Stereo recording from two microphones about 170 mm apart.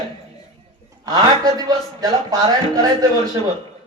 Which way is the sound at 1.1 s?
20° right (ahead or behind).